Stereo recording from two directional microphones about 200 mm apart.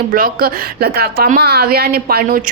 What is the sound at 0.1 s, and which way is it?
Speech, 45° right (ahead or behind).